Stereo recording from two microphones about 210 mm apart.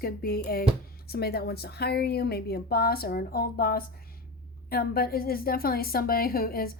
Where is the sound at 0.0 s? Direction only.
45° left (ahead or behind).